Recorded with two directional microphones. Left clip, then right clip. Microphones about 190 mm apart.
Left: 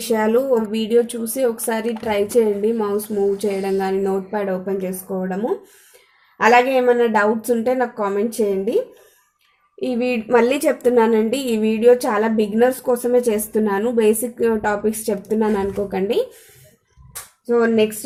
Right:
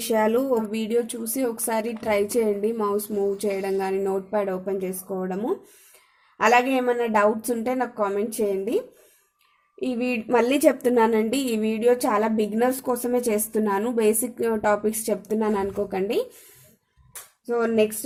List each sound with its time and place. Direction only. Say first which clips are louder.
0.0 s speech: left 4 dB; 35° right (ahead or behind)
9.8 s speech: left 5 dB; 40° right (ahead or behind)
17.4 s speech: left 5 dB; 40° right (ahead or behind)